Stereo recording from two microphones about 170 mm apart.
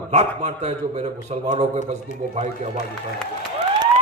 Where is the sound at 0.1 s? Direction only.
45° right (ahead or behind).